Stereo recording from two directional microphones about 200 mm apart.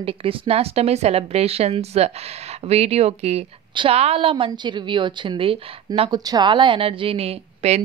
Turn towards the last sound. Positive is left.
turn(degrees=-35)  # may be behind; listen again after turning